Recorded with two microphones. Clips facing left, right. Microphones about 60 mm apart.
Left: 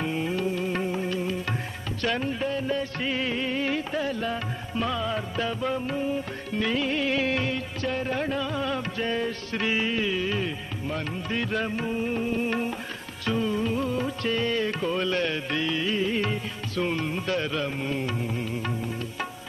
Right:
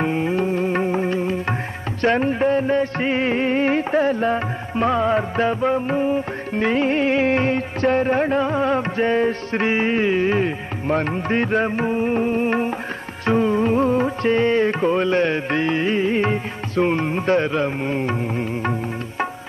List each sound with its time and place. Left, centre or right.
0.0 s music: right